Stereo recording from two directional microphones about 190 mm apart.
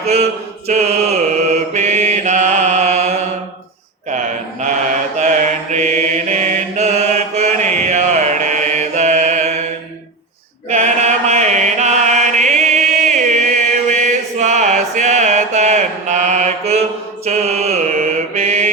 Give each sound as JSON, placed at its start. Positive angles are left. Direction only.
{"t": 0.0, "sound": "mantra", "side_deg": -35}
{"t": 5.2, "sound": "mantra", "side_deg": -40}
{"t": 10.7, "sound": "chant", "side_deg": -35}
{"t": 17.2, "sound": "mantra", "side_deg": -35}